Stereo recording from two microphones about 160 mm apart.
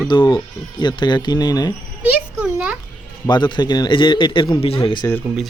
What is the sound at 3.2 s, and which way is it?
A man's voice, 25° left (ahead or behind).